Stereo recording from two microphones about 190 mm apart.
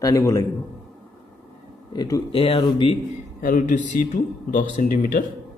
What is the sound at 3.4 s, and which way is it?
Speech, 45° left (ahead or behind).